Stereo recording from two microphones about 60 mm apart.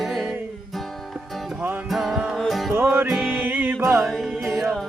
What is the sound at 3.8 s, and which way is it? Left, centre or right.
Music, right.